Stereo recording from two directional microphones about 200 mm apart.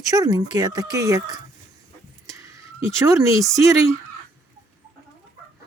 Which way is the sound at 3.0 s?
15° right (ahead or behind).